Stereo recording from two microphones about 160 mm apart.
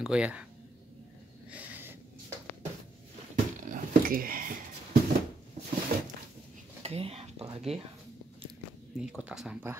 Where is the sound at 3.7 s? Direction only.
60° right (ahead or behind).